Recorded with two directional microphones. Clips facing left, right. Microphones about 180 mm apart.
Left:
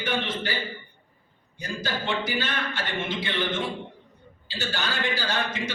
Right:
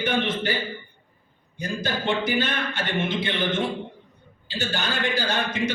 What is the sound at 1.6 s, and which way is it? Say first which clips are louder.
A man's voice: right 4 dB; 20° right (ahead or behind).